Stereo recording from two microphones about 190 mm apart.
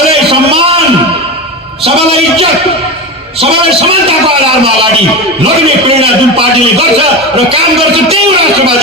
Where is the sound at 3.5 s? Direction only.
30° right (ahead or behind).